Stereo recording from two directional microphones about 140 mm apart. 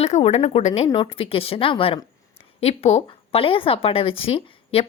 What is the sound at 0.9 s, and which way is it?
A woman's voice, 35° left (ahead or behind).